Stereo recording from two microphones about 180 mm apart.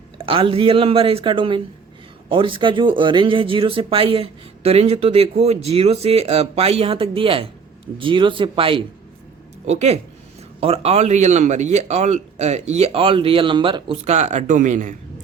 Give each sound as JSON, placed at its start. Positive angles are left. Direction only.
{"t": 0.2, "sound": "speech", "side_deg": -30}